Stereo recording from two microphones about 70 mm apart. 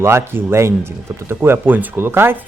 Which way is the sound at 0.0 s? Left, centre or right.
Right.